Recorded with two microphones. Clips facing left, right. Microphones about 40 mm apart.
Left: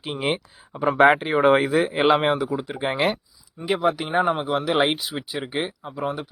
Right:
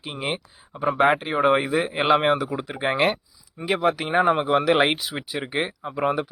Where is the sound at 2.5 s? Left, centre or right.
Right.